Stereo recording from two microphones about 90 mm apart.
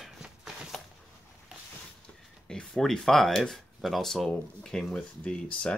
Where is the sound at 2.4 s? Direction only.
5° left (ahead or behind).